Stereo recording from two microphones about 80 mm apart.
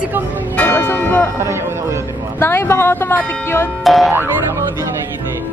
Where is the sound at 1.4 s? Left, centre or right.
Right.